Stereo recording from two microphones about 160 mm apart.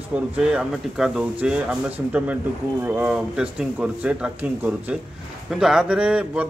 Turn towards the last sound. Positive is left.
turn(degrees=-5)  # may be behind; listen again after turning